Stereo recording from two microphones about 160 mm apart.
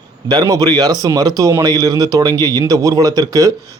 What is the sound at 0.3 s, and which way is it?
Speech, 25° right (ahead or behind).